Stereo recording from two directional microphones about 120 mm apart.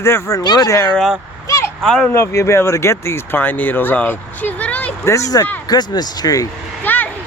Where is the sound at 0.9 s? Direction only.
Centre (ahead or behind).